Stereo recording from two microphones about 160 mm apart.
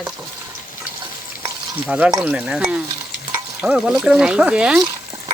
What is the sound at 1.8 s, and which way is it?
Speech, 10° right (ahead or behind).